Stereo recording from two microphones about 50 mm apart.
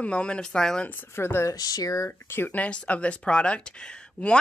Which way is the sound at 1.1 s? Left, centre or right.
Left.